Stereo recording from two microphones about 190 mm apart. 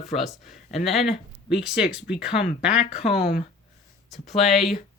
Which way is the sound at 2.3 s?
55° left (ahead or behind).